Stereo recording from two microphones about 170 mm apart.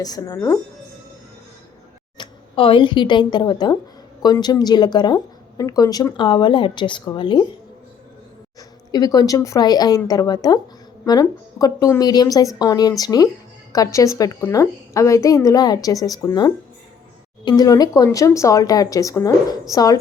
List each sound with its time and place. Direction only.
0.0 s speech: 20° left (ahead or behind)
2.1 s speech: 30° left (ahead or behind)
8.9 s speech: 20° left (ahead or behind)